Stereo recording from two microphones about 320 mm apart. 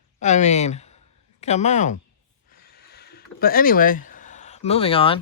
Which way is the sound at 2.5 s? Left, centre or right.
Left.